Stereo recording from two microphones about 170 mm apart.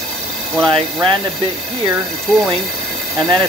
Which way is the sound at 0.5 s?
5° left (ahead or behind).